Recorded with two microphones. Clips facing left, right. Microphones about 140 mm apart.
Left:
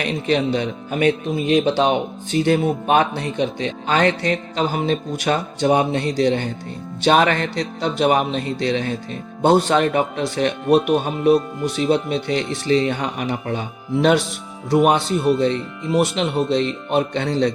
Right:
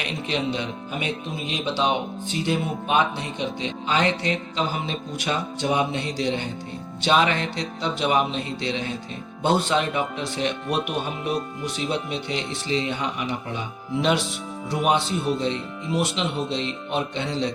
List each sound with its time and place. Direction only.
0.0 s speech: 45° left (ahead or behind)